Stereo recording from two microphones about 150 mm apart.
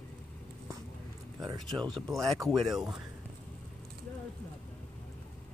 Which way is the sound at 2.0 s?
Centre (ahead or behind).